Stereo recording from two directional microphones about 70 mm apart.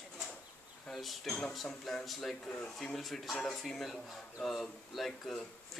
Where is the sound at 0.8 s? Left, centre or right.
Centre.